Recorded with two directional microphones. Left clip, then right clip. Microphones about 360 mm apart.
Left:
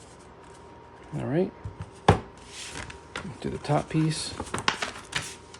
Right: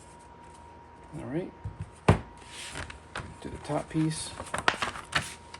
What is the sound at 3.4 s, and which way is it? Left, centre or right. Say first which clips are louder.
Speech: left 6 dB; left.